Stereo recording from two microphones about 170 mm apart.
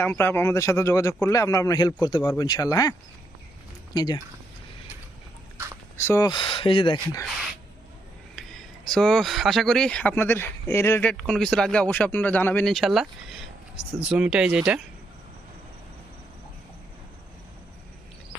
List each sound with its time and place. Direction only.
0.0 s a man's voice: 15° left (ahead or behind)
3.9 s speech: 25° left (ahead or behind)
6.0 s speech: 15° left (ahead or behind)
8.4 s a sound: centre (ahead or behind)
8.9 s speech: 5° left (ahead or behind)